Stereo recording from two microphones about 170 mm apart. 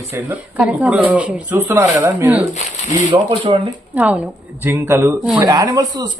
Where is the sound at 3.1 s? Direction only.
30° right (ahead or behind).